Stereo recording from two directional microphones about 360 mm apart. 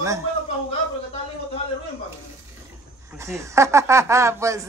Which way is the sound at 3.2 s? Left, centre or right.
Centre.